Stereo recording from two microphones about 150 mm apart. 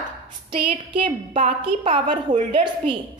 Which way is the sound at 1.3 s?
50° right (ahead or behind).